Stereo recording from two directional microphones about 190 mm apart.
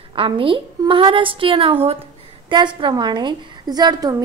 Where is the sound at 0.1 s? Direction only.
30° right (ahead or behind).